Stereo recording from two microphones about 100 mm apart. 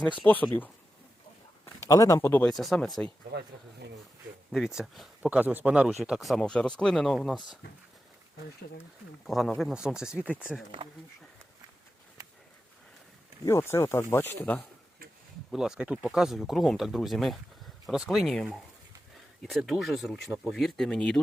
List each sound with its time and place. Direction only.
0.0 s speech: 15° left (ahead or behind)
1.6 s a man's voice: 30° left (ahead or behind)
2.5 s speech: centre (ahead or behind)
4.5 s speech: 5° right (ahead or behind)
5.4 s speech: 15° right (ahead or behind); by 7.3 s 5° left (ahead or behind)
9.2 s speech: centre (ahead or behind)
13.4 s speech: 25° left (ahead or behind)
15.5 s speech: 5° right (ahead or behind)
19.4 s speech: centre (ahead or behind)